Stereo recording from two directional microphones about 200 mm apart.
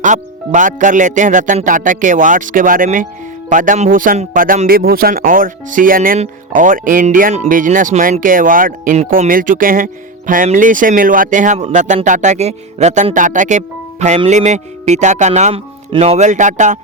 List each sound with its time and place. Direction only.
0.0 s speech: 40° right (ahead or behind)